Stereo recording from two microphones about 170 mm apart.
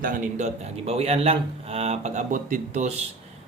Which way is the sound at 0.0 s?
50° right (ahead or behind).